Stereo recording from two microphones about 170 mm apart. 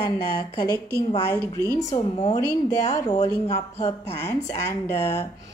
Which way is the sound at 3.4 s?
35° left (ahead or behind).